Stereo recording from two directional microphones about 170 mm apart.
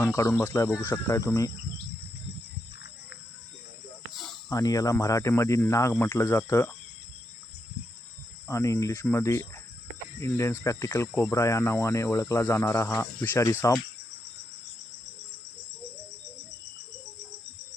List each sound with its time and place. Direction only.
0.0 s speech: 15° left (ahead or behind)
4.1 s cricket: centre (ahead or behind)
4.4 s speech: 20° left (ahead or behind)
8.4 s speech: 20° left (ahead or behind)